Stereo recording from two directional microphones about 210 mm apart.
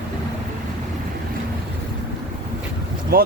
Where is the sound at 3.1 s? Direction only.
45° right (ahead or behind).